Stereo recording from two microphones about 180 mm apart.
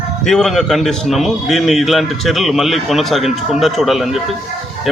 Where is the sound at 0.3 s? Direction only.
Centre (ahead or behind).